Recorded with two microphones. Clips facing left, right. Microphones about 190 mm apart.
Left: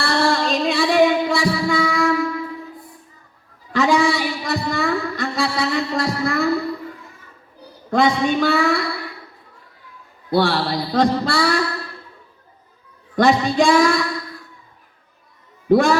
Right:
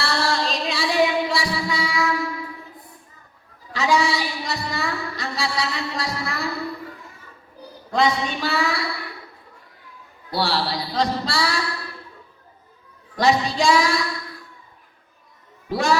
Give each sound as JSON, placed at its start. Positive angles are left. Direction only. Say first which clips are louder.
{"t": 0.0, "sound": "music", "louder": "left 5 dB", "side_deg": 55}
{"t": 3.7, "sound": "music", "louder": "left 4 dB", "side_deg": 55}
{"t": 7.9, "sound": "a sound", "louder": "left 4 dB", "side_deg": 55}
{"t": 10.3, "sound": "speech", "louder": "left 5 dB", "side_deg": 55}
{"t": 13.1, "sound": "female singing", "louder": "left 4 dB", "side_deg": 55}
{"t": 15.7, "sound": "a sound", "louder": "left 7 dB", "side_deg": 55}